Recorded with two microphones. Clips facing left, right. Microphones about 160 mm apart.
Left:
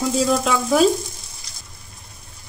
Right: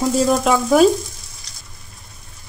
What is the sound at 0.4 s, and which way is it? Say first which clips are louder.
Stir: right 4 dB; 50° right (ahead or behind).